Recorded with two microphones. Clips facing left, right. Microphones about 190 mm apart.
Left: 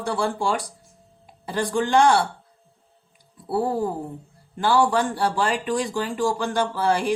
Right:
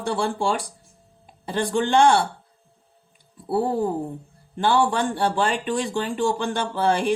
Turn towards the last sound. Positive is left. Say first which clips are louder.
# right 1 dB
turn(degrees=-25)  # may be behind; listen again after turning